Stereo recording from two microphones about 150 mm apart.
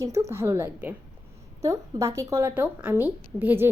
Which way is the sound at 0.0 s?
20° right (ahead or behind).